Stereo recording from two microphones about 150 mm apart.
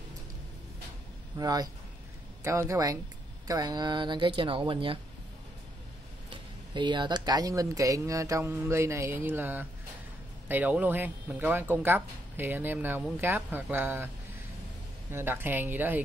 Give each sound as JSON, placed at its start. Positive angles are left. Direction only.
{"t": 1.4, "sound": "speech", "side_deg": -25}
{"t": 6.3, "sound": "speech", "side_deg": -30}